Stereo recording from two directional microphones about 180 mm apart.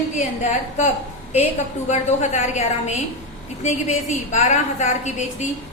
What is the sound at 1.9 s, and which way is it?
A woman's voice, 40° left (ahead or behind).